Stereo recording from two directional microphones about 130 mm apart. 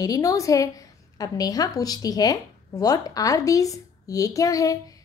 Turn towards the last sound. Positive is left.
turn(degrees=25)  # may be behind; listen again after turning